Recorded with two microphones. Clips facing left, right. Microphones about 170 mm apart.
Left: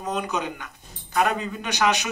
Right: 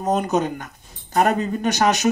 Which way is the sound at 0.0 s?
40° right (ahead or behind).